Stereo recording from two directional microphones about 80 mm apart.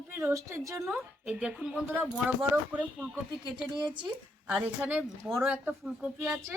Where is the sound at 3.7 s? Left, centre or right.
Right.